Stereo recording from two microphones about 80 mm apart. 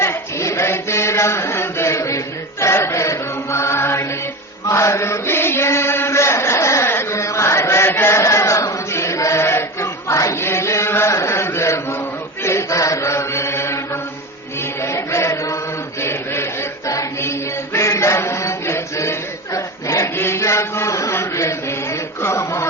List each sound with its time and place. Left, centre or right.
0.0 s chant: left
14.8 s chant: left
19.5 s a sound: left
20.1 s chant: left